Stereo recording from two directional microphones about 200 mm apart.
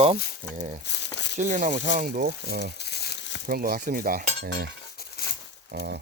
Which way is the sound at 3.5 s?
50° right (ahead or behind).